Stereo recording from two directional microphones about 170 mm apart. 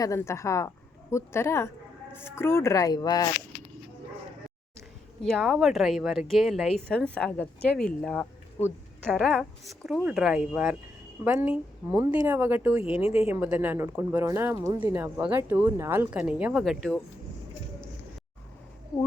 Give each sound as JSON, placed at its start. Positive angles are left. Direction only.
{"t": 0.0, "sound": "speech", "side_deg": 15}
{"t": 5.2, "sound": "speech", "side_deg": 0}
{"t": 12.8, "sound": "speech", "side_deg": 35}
{"t": 13.1, "sound": "speech", "side_deg": -10}